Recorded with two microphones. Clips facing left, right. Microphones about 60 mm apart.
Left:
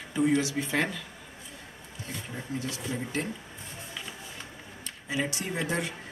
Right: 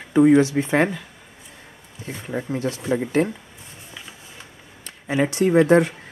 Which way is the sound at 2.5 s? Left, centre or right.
Right.